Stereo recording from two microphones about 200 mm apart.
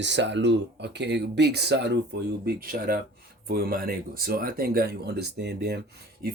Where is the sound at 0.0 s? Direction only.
60° right (ahead or behind).